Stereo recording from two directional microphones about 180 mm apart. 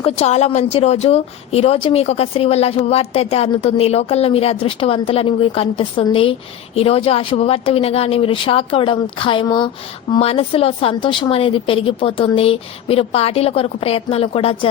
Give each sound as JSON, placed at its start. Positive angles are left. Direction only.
{"t": 0.0, "sound": "a woman's voice", "side_deg": 35}